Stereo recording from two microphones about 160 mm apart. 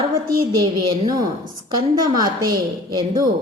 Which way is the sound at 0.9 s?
30° right (ahead or behind).